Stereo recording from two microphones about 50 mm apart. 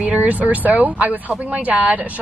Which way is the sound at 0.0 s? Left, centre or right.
Right.